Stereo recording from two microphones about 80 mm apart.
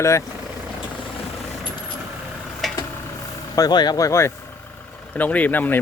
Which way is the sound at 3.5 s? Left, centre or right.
Left.